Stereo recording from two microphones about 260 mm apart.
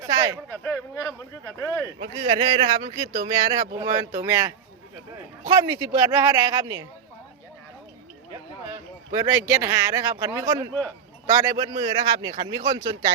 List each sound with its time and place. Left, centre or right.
0.1 s a sound: centre
0.5 s speech: centre
2.0 s a man's voice: centre
9.1 s a man's voice: centre